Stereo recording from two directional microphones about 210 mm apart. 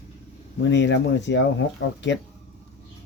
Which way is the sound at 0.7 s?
60° left (ahead or behind).